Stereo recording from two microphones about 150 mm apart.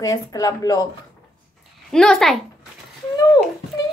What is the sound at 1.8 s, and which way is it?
Speech, centre (ahead or behind).